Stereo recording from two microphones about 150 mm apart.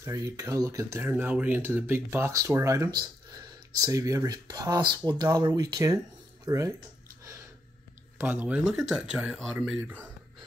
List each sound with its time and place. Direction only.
0.0 s speech: 20° right (ahead or behind)
8.2 s speech: 10° right (ahead or behind)